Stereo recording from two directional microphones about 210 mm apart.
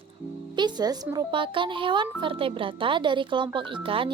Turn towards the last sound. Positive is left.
turn(degrees=-25)  # may be behind; listen again after turning